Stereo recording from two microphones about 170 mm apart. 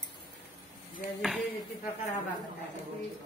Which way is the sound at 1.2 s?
Centre (ahead or behind).